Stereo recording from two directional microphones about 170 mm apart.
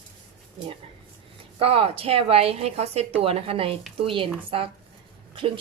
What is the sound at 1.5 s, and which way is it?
Speech, 35° right (ahead or behind).